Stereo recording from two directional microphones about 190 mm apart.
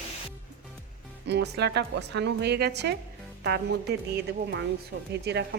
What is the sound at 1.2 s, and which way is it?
A woman's voice, 60° right (ahead or behind).